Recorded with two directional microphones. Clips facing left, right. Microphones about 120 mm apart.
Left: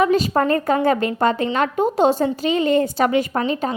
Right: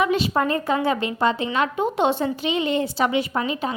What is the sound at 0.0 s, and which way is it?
A woman's voice, 40° left (ahead or behind).